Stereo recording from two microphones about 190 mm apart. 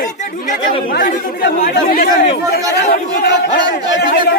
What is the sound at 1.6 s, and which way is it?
Speech, 45° left (ahead or behind).